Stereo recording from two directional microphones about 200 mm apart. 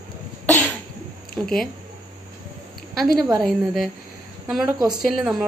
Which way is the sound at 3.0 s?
Centre (ahead or behind).